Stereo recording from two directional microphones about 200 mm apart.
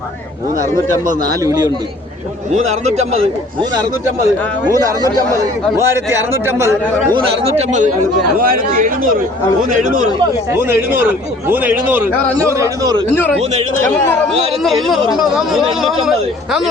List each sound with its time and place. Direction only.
1.2 s a man's voice: 20° right (ahead or behind)
2.5 s a man's voice: 35° right (ahead or behind); by 6.7 s 10° right (ahead or behind)
7.3 s a man's voice: 30° right (ahead or behind)
10.5 s a man's voice: 10° right (ahead or behind)
12.2 s a man's voice: 5° left (ahead or behind)
12.5 s a man's voice: 15° right (ahead or behind)
13.1 s a man's voice: 10° left (ahead or behind)
13.4 s a man's voice: 35° right (ahead or behind)
14.6 s speech: centre (ahead or behind)